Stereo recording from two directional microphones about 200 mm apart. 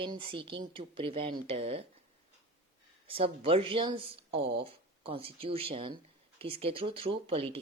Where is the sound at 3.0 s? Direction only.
25° right (ahead or behind).